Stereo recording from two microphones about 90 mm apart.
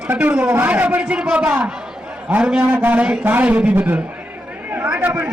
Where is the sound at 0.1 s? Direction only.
20° right (ahead or behind).